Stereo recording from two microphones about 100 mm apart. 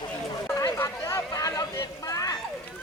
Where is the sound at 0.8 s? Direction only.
30° left (ahead or behind).